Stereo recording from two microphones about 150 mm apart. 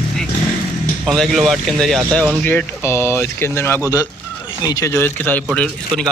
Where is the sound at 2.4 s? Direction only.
10° left (ahead or behind).